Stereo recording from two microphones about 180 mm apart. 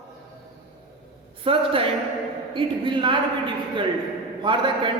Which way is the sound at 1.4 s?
30° right (ahead or behind).